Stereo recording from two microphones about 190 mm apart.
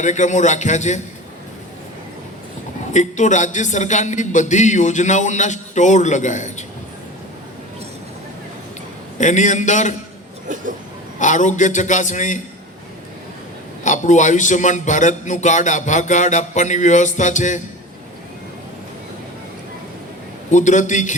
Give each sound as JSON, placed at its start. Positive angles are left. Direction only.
{"t": 0.0, "sound": "a man's voice", "side_deg": 40}
{"t": 2.9, "sound": "a man's voice", "side_deg": 40}
{"t": 9.1, "sound": "a man's voice", "side_deg": 40}
{"t": 11.2, "sound": "a man's voice", "side_deg": 40}
{"t": 13.8, "sound": "a man's voice", "side_deg": 40}
{"t": 20.5, "sound": "a man's voice", "side_deg": 40}